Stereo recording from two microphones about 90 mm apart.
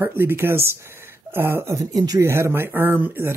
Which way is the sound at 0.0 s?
25° right (ahead or behind).